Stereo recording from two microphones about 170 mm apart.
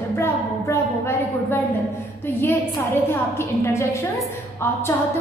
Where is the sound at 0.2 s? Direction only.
15° left (ahead or behind).